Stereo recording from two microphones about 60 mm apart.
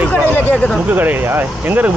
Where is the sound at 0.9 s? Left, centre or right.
Right.